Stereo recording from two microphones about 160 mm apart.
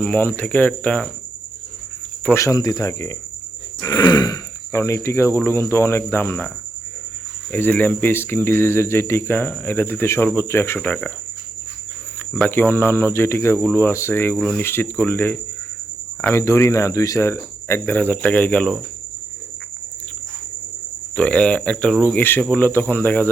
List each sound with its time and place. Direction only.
0.0 s speech: 10° left (ahead or behind)
2.2 s speech: 15° left (ahead or behind)
7.5 s speech: 10° left (ahead or behind)
12.3 s speech: 10° left (ahead or behind)
21.2 s speech: 5° left (ahead or behind)